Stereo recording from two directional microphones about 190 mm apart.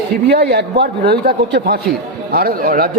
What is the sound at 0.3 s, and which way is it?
A man's voice, 60° right (ahead or behind).